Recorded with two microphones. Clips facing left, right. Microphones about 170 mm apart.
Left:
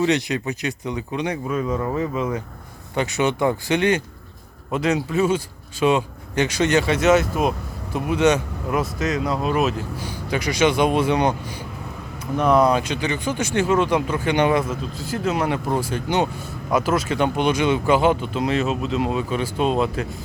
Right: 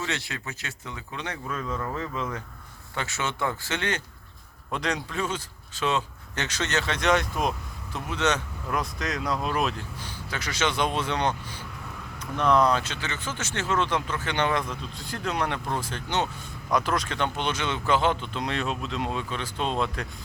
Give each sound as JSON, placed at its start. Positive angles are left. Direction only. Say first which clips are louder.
{"t": 0.0, "sound": "speech", "louder": "left 13 dB", "side_deg": 15}
{"t": 12.4, "sound": "speech", "louder": "left 5 dB", "side_deg": 10}